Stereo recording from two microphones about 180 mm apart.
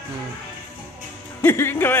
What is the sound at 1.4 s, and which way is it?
Speech, 15° left (ahead or behind).